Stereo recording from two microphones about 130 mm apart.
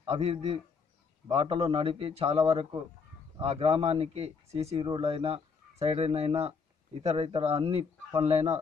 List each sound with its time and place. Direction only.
0.0 s speech: 50° right (ahead or behind)